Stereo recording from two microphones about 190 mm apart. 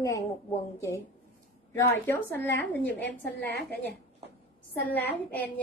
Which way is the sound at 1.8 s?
10° left (ahead or behind).